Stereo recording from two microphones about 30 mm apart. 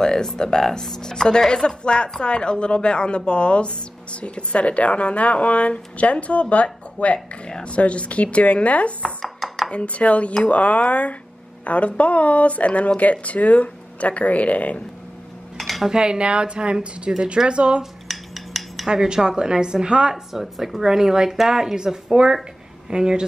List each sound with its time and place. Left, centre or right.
0.0 s a woman's voice: left
9.2 s dishes: centre
9.7 s a woman's voice: left
15.5 s dishes: centre
16.0 s speech: right
18.0 s cutlery: centre
18.9 s a woman's voice: right
20.3 s speech: centre
21.7 s a woman's voice: right